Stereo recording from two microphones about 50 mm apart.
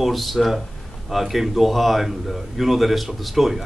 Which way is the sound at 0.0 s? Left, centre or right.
Centre.